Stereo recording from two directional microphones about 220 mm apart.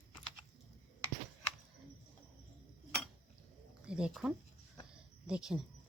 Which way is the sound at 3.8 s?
5° right (ahead or behind).